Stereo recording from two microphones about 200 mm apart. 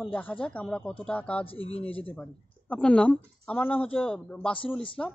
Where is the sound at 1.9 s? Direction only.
5° left (ahead or behind).